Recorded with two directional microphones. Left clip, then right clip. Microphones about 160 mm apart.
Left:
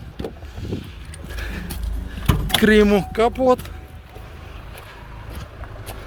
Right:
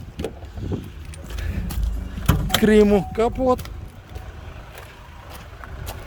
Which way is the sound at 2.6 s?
15° right (ahead or behind).